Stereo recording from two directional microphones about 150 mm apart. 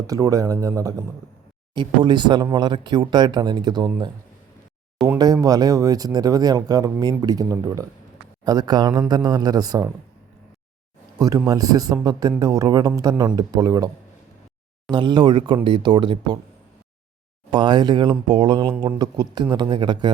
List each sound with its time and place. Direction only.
0.1 s speech: 25° right (ahead or behind)
5.0 s speech: 25° right (ahead or behind)
11.2 s speech: 25° right (ahead or behind)
17.5 s speech: 30° right (ahead or behind)